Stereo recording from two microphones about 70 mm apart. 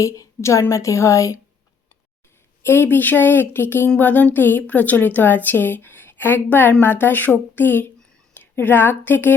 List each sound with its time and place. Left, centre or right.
0.0 s a woman's voice: left
2.6 s a woman's voice: left